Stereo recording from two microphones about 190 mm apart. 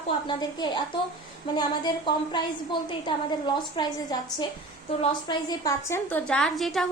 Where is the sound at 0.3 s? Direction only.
25° left (ahead or behind).